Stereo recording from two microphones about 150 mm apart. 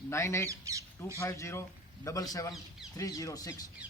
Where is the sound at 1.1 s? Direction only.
20° left (ahead or behind).